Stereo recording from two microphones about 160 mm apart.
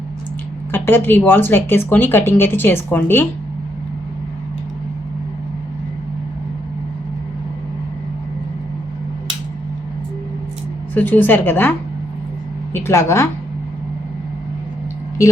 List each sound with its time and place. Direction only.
0.7 s a woman's voice: 15° left (ahead or behind)
10.9 s a woman's voice: 10° left (ahead or behind)
12.7 s a woman's voice: 15° left (ahead or behind)